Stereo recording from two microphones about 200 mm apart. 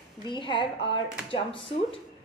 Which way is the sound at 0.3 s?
25° left (ahead or behind).